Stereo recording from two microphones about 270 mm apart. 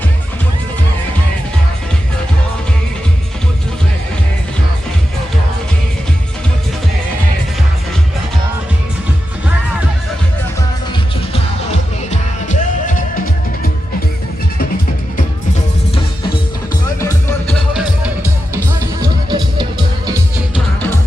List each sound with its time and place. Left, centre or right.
12.5 s music: left
17.0 s music: centre
19.0 s music: centre